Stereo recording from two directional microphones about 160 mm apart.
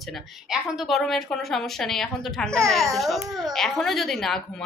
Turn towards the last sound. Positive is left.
turn(degrees=0)  # may be behind; listen again after turning